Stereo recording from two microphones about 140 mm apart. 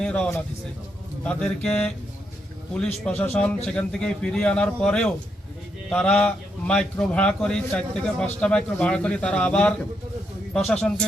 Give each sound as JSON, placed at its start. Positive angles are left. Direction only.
{"t": 0.0, "sound": "a man's voice", "side_deg": 5}
{"t": 3.1, "sound": "a man's voice", "side_deg": 15}
{"t": 3.3, "sound": "a man's voice", "side_deg": 5}